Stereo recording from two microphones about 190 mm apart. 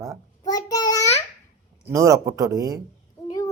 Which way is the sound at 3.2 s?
20° left (ahead or behind).